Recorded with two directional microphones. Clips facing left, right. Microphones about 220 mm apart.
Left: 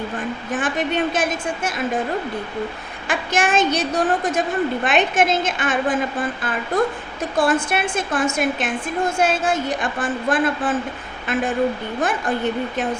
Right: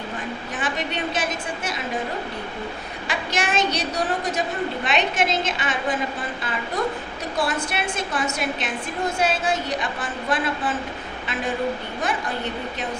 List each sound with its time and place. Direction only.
0.5 s a woman's voice: 50° left (ahead or behind)
3.1 s a woman's voice: 50° left (ahead or behind)